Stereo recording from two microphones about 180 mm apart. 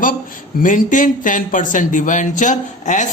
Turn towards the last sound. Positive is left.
turn(degrees=45)  # may be behind; listen again after turning